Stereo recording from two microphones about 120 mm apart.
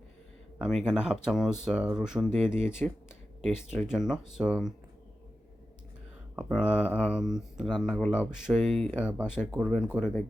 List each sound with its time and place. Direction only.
0.6 s speech: centre (ahead or behind)
2.5 s speech: 20° left (ahead or behind)
3.8 s speech: 5° right (ahead or behind)
6.3 s speech: 5° right (ahead or behind)